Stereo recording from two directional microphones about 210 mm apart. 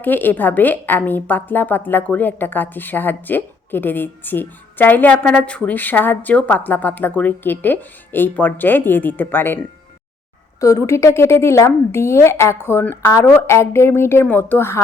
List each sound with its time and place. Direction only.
0.0 s a woman's voice: 10° left (ahead or behind)